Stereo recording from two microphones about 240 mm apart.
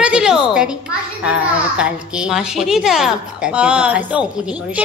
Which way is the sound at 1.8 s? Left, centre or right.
Centre.